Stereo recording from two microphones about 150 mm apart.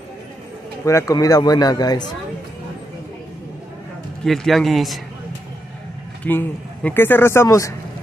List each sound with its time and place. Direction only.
0.8 s a man's voice: 20° left (ahead or behind)
4.2 s speech: centre (ahead or behind)
6.2 s speech: 10° left (ahead or behind)